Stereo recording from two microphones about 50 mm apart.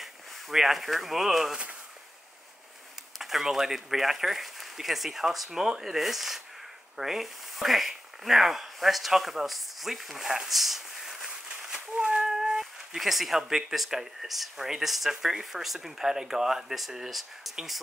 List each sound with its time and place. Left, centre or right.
0.0 s speech: centre
3.2 s speech: centre
11.9 s cat: right
12.2 s speech: centre